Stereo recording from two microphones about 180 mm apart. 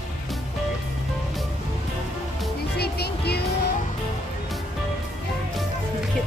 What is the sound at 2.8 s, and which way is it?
Music, 65° left (ahead or behind).